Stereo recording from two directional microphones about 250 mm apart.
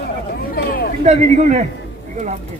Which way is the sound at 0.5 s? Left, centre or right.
Left.